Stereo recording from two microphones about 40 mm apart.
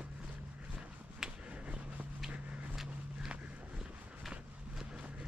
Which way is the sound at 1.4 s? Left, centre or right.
Right.